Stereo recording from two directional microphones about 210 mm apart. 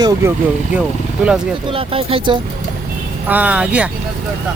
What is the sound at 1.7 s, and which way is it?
Speech, 25° right (ahead or behind).